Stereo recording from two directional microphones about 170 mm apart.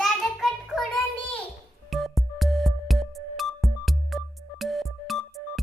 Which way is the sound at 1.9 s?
Centre (ahead or behind).